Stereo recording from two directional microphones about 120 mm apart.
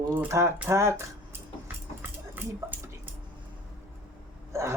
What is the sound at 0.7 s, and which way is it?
Dog, 25° right (ahead or behind).